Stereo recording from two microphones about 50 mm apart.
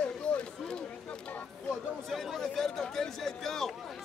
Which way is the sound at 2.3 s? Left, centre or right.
Centre.